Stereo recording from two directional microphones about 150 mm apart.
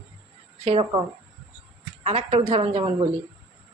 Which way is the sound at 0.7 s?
40° right (ahead or behind).